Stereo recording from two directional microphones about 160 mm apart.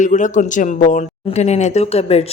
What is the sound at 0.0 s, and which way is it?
Speech, 50° left (ahead or behind).